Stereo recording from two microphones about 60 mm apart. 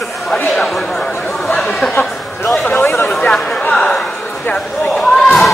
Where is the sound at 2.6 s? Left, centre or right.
Left.